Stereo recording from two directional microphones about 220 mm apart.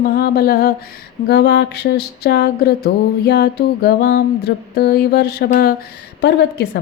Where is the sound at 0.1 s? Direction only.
45° left (ahead or behind).